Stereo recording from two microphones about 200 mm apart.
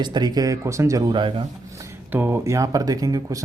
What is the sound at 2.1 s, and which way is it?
Speech, 10° right (ahead or behind).